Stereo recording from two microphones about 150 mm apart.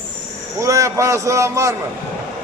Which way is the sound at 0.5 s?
20° right (ahead or behind).